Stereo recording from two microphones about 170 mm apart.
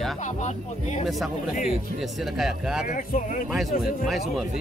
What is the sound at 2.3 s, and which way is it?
Speech, centre (ahead or behind).